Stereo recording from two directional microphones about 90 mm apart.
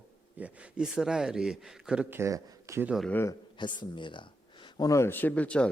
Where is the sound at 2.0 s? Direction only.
25° right (ahead or behind).